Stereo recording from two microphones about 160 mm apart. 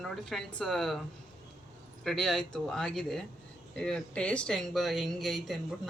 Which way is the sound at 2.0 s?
5° left (ahead or behind).